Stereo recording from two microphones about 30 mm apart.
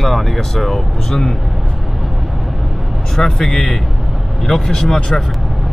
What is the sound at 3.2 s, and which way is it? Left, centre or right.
Speech, centre.